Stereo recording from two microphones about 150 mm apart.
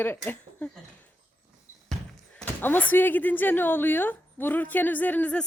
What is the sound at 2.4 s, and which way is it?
A woman's voice, 10° left (ahead or behind).